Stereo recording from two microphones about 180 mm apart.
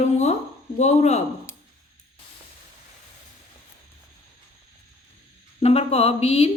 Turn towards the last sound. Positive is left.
turn(degrees=35)  # may be behind; listen again after turning